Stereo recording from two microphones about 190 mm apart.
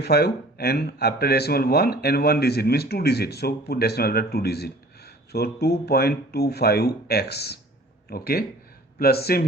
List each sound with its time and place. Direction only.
0.0 s speech: 55° left (ahead or behind)